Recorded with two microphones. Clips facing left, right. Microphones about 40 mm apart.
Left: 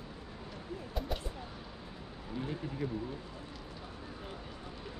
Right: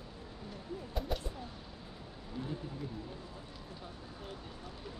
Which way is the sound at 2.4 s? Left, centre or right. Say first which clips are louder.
Left 2 dB; left.